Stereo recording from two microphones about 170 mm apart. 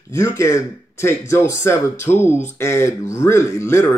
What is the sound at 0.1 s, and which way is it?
Speech, 15° left (ahead or behind).